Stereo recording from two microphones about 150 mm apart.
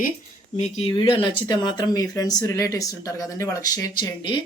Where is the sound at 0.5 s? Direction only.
45° left (ahead or behind).